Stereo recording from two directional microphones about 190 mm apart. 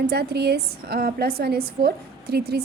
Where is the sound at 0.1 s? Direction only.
55° right (ahead or behind).